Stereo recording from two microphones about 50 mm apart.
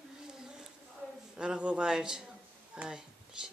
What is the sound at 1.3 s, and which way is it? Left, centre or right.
Speech, centre.